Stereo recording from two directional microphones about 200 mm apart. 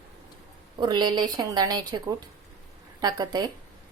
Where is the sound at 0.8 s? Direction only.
20° right (ahead or behind).